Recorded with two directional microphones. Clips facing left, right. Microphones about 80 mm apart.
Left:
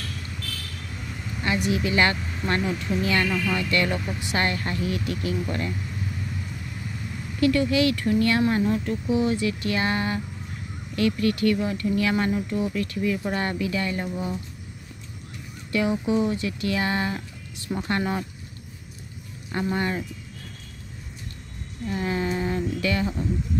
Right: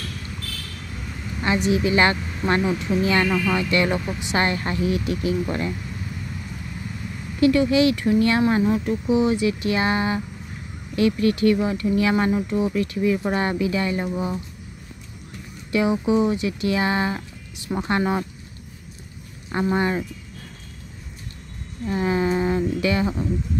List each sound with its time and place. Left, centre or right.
1.4 s speech: right
7.3 s speech: centre
15.7 s speech: centre
19.5 s speech: right
21.8 s speech: right